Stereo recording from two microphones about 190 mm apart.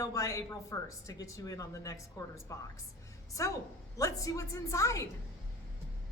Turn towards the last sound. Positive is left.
turn(degrees=15)  # may be behind; listen again after turning